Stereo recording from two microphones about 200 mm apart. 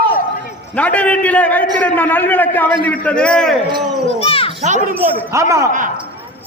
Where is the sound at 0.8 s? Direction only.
5° left (ahead or behind).